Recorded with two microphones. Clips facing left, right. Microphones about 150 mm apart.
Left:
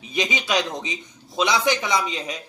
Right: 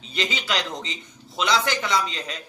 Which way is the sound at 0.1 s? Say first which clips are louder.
Left 4 dB; 15° left (ahead or behind).